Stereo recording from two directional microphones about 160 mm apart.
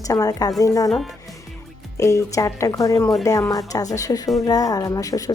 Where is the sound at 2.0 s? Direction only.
20° left (ahead or behind).